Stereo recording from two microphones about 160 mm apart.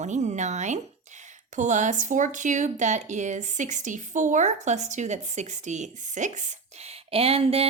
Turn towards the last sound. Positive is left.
turn(degrees=-40)  # may be behind; listen again after turning